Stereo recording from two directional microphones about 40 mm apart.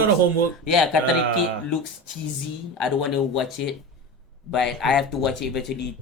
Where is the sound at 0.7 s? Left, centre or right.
Centre.